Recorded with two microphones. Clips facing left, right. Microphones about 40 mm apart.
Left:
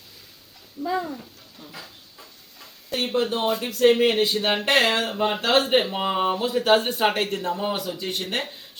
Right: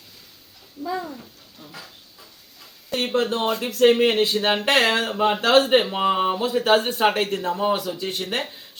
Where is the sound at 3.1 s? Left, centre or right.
Centre.